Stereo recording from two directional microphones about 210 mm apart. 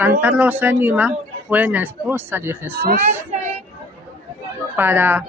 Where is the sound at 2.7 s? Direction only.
45° right (ahead or behind).